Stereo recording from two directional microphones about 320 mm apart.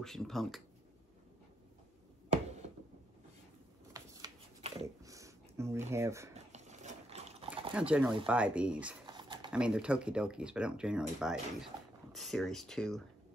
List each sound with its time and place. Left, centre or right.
0.0 s speech: centre
3.9 s shuffling cards: centre
6.3 s a sound: right
7.7 s speech: centre
9.0 s typing: centre
9.5 s speech: centre